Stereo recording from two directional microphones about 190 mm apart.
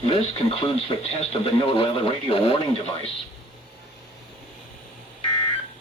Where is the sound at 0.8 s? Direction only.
30° left (ahead or behind).